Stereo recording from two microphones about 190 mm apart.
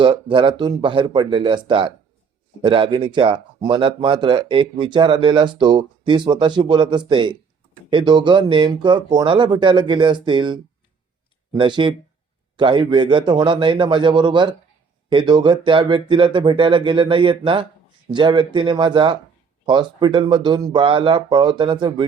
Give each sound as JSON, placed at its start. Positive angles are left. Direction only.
{"t": 0.0, "sound": "speech", "side_deg": -25}